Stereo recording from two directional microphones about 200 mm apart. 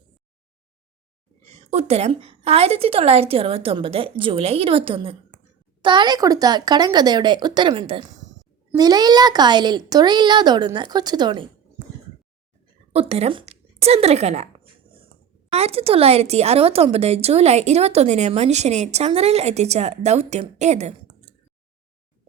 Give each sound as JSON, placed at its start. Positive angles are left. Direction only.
{"t": 1.5, "sound": "a woman's voice", "side_deg": -30}
{"t": 12.9, "sound": "a woman's voice", "side_deg": -30}
{"t": 15.5, "sound": "speech", "side_deg": -30}